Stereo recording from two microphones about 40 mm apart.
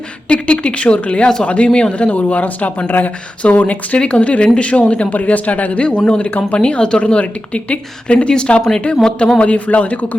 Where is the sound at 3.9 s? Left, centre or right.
Left.